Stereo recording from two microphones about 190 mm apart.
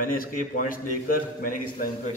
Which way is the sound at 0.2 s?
45° left (ahead or behind).